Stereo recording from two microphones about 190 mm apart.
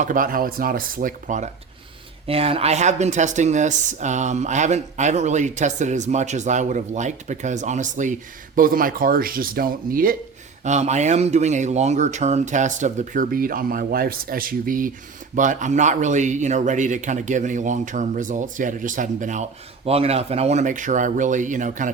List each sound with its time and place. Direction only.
0.0 s speech: 45° right (ahead or behind)
2.2 s speech: 30° right (ahead or behind); by 10.2 s 50° right (ahead or behind)
10.6 s speech: 35° right (ahead or behind)